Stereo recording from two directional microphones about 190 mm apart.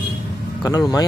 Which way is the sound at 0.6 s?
20° left (ahead or behind).